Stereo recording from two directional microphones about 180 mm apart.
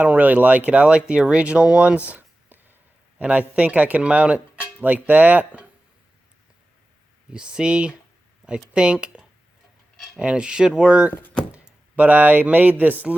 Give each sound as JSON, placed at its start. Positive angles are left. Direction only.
{"t": 0.0, "sound": "speech", "side_deg": -10}
{"t": 7.3, "sound": "speech", "side_deg": -5}
{"t": 11.1, "sound": "speech", "side_deg": 10}
{"t": 11.5, "sound": "speech", "side_deg": -10}